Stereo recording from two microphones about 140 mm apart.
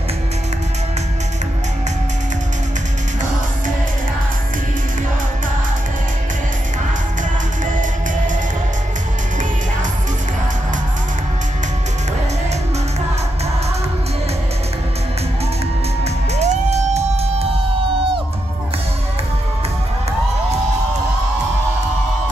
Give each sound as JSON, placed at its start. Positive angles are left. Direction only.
{"t": 16.3, "sound": "music", "side_deg": -50}